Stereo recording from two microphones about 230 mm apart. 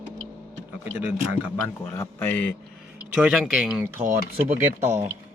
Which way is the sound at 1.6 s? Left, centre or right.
Centre.